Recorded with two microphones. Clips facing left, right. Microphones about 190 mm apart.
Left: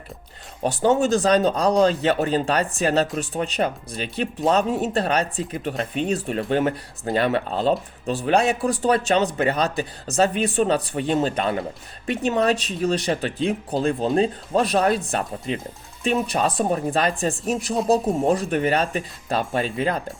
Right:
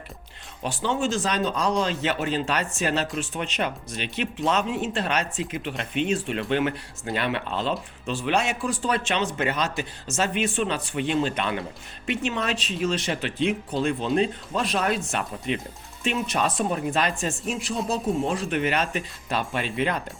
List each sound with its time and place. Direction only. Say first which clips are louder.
0.6 s speech: left 7 dB; 45° left (ahead or behind)